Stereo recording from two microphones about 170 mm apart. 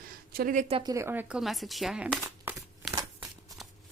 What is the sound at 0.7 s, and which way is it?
Speech, 20° right (ahead or behind).